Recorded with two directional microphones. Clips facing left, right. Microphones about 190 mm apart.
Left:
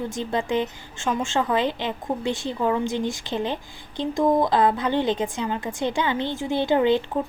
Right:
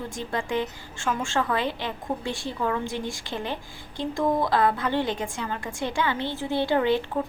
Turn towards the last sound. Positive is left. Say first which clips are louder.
# left 3 dB
turn(degrees=20)  # may be behind; listen again after turning